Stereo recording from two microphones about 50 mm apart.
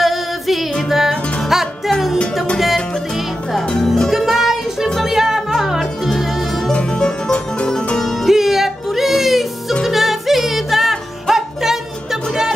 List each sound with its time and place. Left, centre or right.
0.0 s music: centre
4.3 s music: centre
6.7 s music: centre
8.3 s music: centre